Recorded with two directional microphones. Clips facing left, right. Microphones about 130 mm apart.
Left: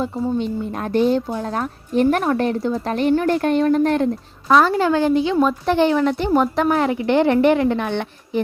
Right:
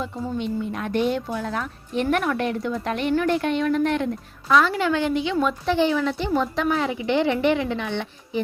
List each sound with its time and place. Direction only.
0.0 s speech: 35° left (ahead or behind)
5.6 s a woman's voice: 55° left (ahead or behind)